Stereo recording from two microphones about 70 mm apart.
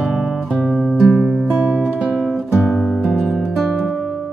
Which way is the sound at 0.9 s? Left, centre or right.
Centre.